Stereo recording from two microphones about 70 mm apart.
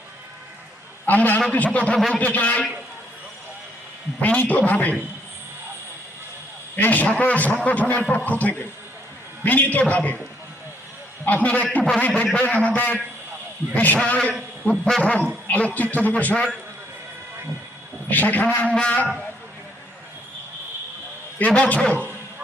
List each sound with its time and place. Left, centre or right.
1.0 s a man's voice: left
4.2 s a man's voice: left
6.7 s a man's voice: left
11.4 s a man's voice: left
14.7 s a man's voice: centre
18.1 s a man's voice: left
21.3 s a man's voice: centre